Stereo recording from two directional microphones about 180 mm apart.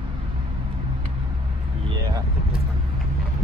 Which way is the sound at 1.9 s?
25° right (ahead or behind).